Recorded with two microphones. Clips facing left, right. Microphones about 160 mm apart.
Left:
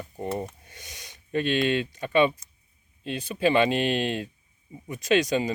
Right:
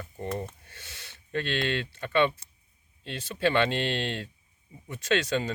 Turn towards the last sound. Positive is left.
turn(degrees=15)  # may be behind; listen again after turning